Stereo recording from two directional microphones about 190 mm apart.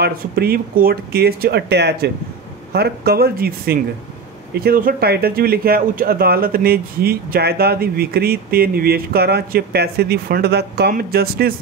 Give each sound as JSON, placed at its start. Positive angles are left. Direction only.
{"t": 0.0, "sound": "speech", "side_deg": -55}